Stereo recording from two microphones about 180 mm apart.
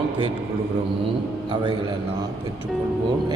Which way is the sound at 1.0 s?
25° right (ahead or behind).